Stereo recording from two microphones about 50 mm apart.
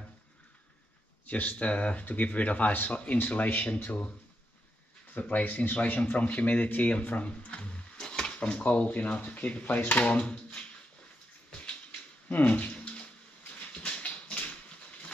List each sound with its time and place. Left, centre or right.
1.2 s speech: left
5.2 s speech: left
12.3 s bathtub: left
13.8 s a sound: left